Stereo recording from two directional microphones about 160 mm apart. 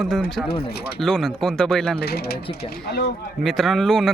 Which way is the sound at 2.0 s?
80° left.